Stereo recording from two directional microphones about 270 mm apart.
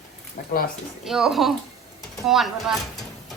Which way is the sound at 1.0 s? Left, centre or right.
Centre.